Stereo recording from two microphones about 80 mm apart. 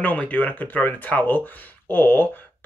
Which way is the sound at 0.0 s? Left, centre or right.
Left.